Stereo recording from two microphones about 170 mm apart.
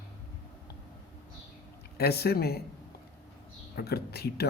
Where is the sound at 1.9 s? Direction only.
70° left (ahead or behind).